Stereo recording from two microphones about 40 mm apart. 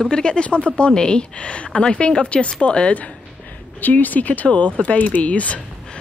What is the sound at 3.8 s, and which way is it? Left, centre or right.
A woman's voice, left.